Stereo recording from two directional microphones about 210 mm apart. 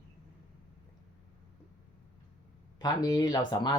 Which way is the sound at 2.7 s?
20° left (ahead or behind).